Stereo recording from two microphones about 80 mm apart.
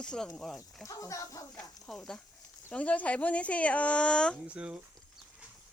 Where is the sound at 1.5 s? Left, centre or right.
Centre.